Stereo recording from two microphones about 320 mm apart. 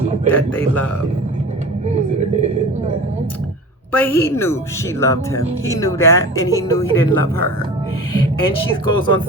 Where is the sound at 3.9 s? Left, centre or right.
Centre.